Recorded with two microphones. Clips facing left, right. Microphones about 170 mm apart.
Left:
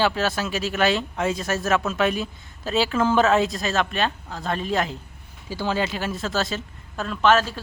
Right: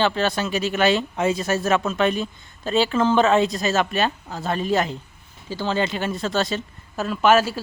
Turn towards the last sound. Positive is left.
turn(degrees=-10)  # may be behind; listen again after turning